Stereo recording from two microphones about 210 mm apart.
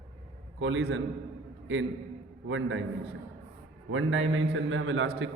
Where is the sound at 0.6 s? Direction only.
70° right (ahead or behind).